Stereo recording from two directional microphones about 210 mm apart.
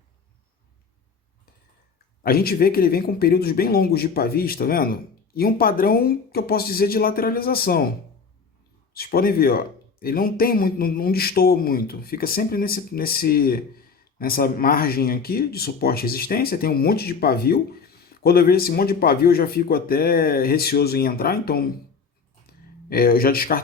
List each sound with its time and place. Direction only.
2.2 s a man's voice: 45° left (ahead or behind)
8.9 s a man's voice: 45° left (ahead or behind)
22.4 s a sound: 45° left (ahead or behind)